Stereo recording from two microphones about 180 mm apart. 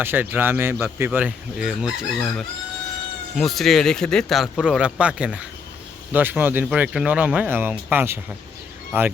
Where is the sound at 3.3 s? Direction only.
Centre (ahead or behind).